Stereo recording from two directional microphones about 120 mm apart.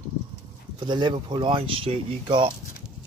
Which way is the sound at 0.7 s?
40° right (ahead or behind).